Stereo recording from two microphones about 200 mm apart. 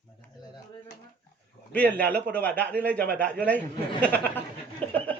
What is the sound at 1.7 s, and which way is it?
Speech, 10° left (ahead or behind).